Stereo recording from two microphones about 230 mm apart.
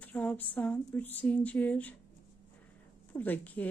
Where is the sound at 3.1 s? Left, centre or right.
Centre.